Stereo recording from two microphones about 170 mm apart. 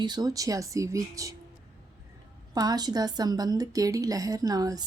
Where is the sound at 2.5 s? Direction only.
25° right (ahead or behind).